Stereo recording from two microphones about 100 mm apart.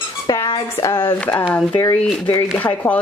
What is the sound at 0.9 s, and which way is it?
Speech, 55° left (ahead or behind).